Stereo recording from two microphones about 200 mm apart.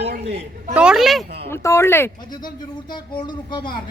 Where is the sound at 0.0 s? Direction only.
55° right (ahead or behind).